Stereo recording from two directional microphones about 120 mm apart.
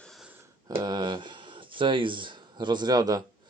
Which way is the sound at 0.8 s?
35° right (ahead or behind).